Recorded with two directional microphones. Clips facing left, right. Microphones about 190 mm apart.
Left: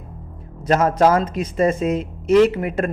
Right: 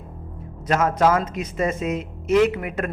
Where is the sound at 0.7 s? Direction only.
35° left (ahead or behind).